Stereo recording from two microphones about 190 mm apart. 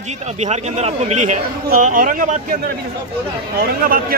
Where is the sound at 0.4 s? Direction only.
35° right (ahead or behind).